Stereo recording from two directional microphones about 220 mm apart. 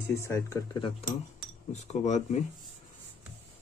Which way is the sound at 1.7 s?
30° left (ahead or behind).